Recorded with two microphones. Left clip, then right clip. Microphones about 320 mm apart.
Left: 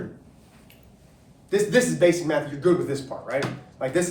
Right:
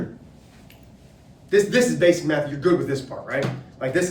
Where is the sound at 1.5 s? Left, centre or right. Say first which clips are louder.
Right 3 dB; centre.